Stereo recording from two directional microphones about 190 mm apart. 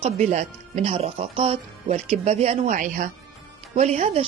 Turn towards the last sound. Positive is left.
turn(degrees=-35)  # may be behind; listen again after turning